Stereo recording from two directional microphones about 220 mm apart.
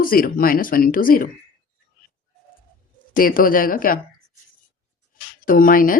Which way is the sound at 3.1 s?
40° left (ahead or behind).